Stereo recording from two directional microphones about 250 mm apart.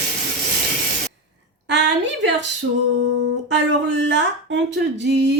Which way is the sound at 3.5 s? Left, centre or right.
Right.